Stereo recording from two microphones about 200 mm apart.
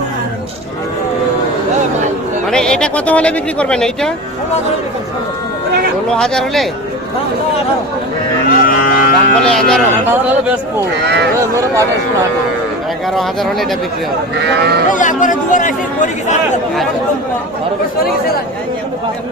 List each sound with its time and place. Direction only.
2.5 s speech: 5° left (ahead or behind)
6.1 s speech: 5° left (ahead or behind)
8.4 s speech: 45° left (ahead or behind)
9.4 s speech: 5° left (ahead or behind)
9.9 s speech: 10° right (ahead or behind)
11.0 s speech: 55° right (ahead or behind)
13.1 s speech: centre (ahead or behind)
14.4 s speech: 55° right (ahead or behind)
14.8 s speech: 40° left (ahead or behind)